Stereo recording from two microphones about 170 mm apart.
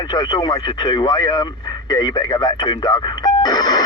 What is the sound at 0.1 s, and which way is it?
Speech, 25° left (ahead or behind).